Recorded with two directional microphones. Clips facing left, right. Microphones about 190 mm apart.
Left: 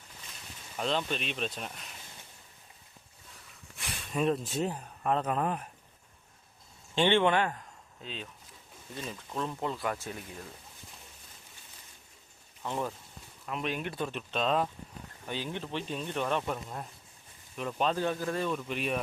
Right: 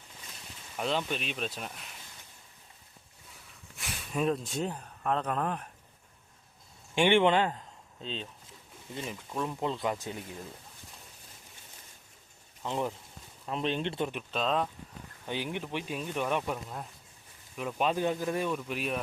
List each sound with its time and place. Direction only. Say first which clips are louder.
0.8 s speech: even; 10° right (ahead or behind)
3.8 s speech: even; centre (ahead or behind)
6.9 s speech: right 2 dB; 15° right (ahead or behind)
8.0 s speech: right 3 dB; 30° right (ahead or behind)
8.9 s speech: right 1 dB; 20° right (ahead or behind)
12.6 s speech: right 2 dB; 20° right (ahead or behind)
13.4 s speech: right 3 dB; 30° right (ahead or behind)
14.1 s speech: left 1 dB; 5° right (ahead or behind)
15.3 s speech: right 1 dB; 15° right (ahead or behind)